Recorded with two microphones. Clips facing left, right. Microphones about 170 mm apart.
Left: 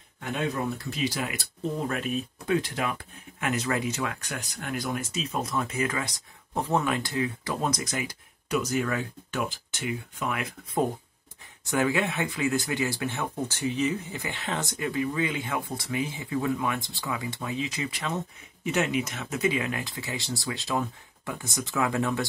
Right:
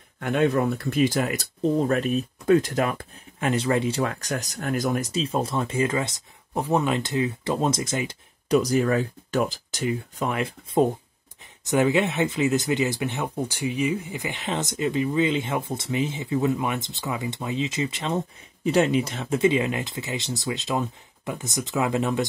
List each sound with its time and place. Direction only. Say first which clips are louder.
0.2 s speech: right 8 dB; 60° right (ahead or behind); by 3.4 s 45° right (ahead or behind)
3.4 s speech: right 5 dB; 30° right (ahead or behind)